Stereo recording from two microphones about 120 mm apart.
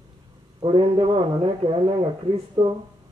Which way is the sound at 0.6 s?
45° right (ahead or behind).